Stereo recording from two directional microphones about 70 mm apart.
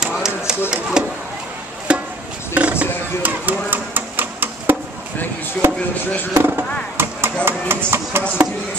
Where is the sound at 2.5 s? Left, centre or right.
Centre.